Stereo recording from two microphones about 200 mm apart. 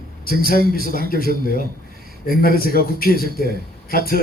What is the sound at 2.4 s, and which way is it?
A man's voice, 50° left (ahead or behind).